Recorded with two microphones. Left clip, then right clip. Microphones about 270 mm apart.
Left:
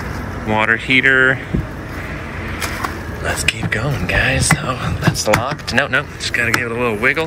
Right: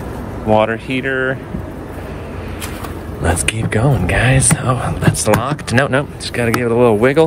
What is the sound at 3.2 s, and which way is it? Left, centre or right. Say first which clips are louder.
Speech: right 1 dB; right.